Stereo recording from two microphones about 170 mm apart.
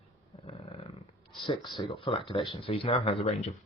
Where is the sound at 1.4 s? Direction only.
30° left (ahead or behind).